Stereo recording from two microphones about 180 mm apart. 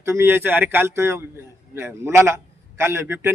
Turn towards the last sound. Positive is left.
turn(degrees=-15)  # may be behind; listen again after turning